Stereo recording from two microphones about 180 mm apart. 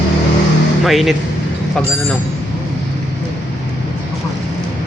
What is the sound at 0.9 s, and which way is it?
Speech, centre (ahead or behind).